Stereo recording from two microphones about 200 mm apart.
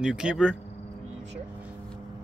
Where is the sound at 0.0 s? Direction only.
5° right (ahead or behind).